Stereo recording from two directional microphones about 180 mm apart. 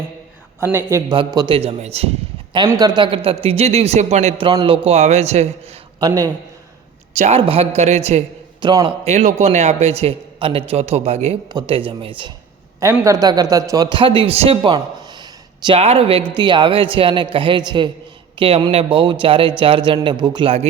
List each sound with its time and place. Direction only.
0.6 s a man's voice: 15° right (ahead or behind); by 2.0 s 35° right (ahead or behind)
2.6 s a man's voice: 20° right (ahead or behind); by 5.7 s 35° right (ahead or behind)
6.0 s a man's voice: 20° right (ahead or behind)
7.2 s a man's voice: 35° right (ahead or behind)
8.6 s a man's voice: 25° right (ahead or behind)
9.0 s a man's voice: 40° right (ahead or behind)
11.4 s a man's voice: 25° right (ahead or behind)
12.8 s a man's voice: 15° right (ahead or behind)